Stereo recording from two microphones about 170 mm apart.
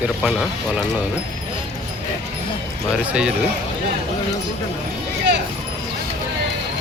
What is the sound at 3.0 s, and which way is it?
Speech, 5° right (ahead or behind).